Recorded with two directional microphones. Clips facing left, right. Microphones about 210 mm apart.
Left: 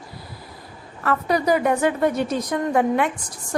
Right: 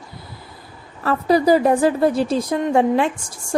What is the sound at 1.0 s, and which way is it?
A woman's voice, 30° right (ahead or behind).